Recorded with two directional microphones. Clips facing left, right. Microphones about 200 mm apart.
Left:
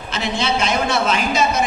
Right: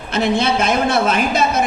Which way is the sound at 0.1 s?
55° right (ahead or behind).